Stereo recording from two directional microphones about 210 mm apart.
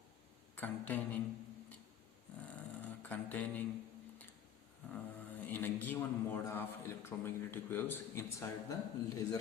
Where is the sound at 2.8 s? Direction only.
5° left (ahead or behind).